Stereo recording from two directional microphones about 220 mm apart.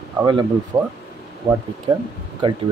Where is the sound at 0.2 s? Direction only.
20° right (ahead or behind).